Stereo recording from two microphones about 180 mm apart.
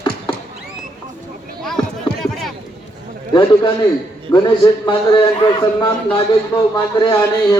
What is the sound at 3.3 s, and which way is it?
A man's voice, 25° left (ahead or behind).